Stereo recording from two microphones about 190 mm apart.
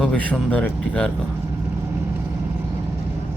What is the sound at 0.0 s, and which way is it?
Speech, 5° left (ahead or behind).